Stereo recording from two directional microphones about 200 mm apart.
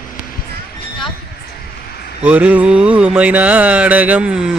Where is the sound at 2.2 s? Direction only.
5° right (ahead or behind).